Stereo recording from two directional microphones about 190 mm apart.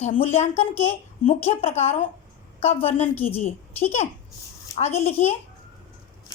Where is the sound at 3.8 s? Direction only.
35° left (ahead or behind).